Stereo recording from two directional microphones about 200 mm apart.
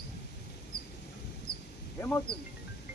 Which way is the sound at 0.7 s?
50° left (ahead or behind).